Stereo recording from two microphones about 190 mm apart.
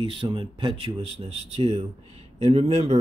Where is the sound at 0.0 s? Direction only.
25° right (ahead or behind).